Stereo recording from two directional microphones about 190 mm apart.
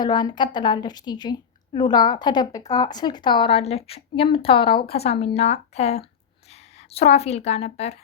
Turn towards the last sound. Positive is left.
turn(degrees=35)  # may be behind; listen again after turning